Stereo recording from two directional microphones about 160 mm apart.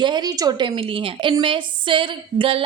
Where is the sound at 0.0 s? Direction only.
25° right (ahead or behind).